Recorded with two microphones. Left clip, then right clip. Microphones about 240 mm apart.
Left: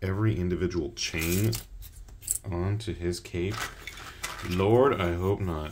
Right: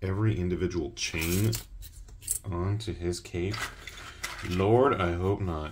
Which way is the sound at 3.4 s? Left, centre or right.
Left.